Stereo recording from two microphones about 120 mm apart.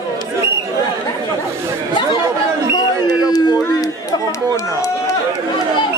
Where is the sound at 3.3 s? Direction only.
35° left (ahead or behind).